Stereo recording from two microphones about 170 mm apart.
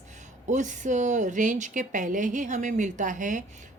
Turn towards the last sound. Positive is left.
turn(degrees=-50)  # may be behind; listen again after turning